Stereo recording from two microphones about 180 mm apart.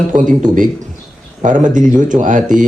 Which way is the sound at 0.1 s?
45° right (ahead or behind).